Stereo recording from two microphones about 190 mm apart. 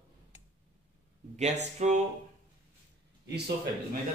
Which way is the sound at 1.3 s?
35° right (ahead or behind).